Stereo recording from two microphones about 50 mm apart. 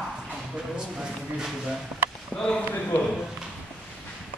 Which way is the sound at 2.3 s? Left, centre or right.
Centre.